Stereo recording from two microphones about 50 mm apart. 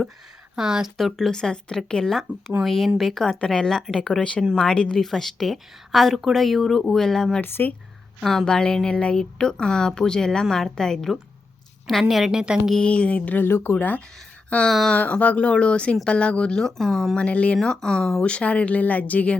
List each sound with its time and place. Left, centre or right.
0.5 s speech: centre
0.9 s a woman's voice: centre
3.4 s a woman's voice: centre
3.7 s speech: centre
3.9 s a woman's voice: centre
7.4 s speech: left
8.2 s a woman's voice: centre
12.3 s speech: centre
12.8 s speech: left
13.4 s speech: left
13.7 s a woman's voice: left; by 17.2 s centre
17.2 s speech: left
17.6 s speech: centre; by 19.4 s left